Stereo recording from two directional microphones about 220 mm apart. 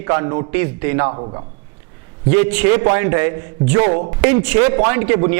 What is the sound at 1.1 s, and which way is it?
Speech, 25° right (ahead or behind).